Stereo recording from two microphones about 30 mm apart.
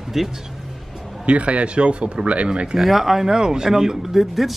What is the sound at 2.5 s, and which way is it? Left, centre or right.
Speech, right.